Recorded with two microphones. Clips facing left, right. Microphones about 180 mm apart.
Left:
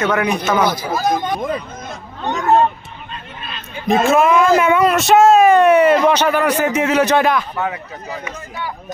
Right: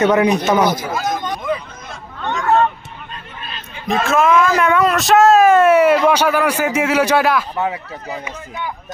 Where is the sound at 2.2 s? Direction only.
15° left (ahead or behind).